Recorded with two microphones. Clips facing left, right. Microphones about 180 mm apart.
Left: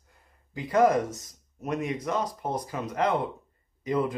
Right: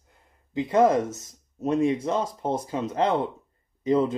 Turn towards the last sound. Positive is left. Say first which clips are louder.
# right 5 dB
turn(degrees=-25)  # may be behind; listen again after turning